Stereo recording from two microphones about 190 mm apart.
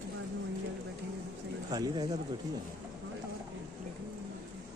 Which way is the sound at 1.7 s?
20° right (ahead or behind).